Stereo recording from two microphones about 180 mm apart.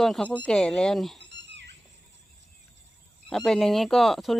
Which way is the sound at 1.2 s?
80° right.